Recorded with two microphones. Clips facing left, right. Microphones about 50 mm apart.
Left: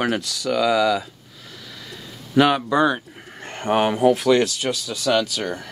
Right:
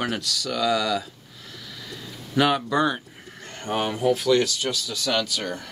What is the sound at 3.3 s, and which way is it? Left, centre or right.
Speech, left.